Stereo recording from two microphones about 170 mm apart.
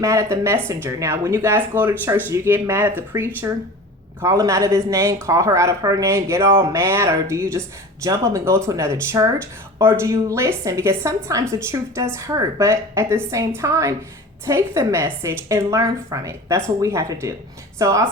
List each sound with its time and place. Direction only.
0.0 s a woman's voice: 15° right (ahead or behind)